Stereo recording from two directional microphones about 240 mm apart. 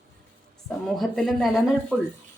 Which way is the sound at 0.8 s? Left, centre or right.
Centre.